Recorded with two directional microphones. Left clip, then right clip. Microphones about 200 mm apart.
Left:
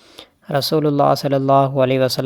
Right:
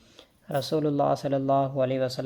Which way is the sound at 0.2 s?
35° left (ahead or behind).